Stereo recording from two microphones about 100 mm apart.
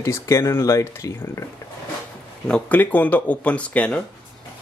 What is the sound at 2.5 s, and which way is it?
Speech, 15° left (ahead or behind).